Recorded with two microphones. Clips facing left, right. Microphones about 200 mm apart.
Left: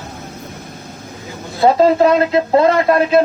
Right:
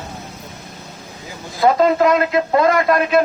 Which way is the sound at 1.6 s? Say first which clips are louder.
Left 3 dB; 30° left (ahead or behind).